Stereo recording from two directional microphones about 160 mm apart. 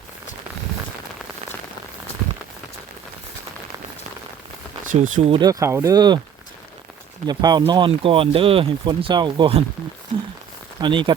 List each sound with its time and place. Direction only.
4.9 s speech: 55° right (ahead or behind)
5.3 s speech: 25° right (ahead or behind)
7.3 s speech: 25° right (ahead or behind)
10.8 s speech: 30° right (ahead or behind)